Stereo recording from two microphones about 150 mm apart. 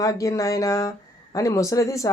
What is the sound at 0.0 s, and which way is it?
Speech, 20° left (ahead or behind).